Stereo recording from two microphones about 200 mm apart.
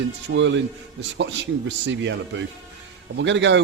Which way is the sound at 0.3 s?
65° right (ahead or behind).